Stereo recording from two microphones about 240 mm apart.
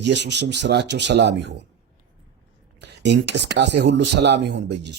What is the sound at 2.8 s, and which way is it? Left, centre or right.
Speech, right.